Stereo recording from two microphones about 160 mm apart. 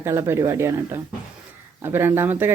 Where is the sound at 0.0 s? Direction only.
15° right (ahead or behind).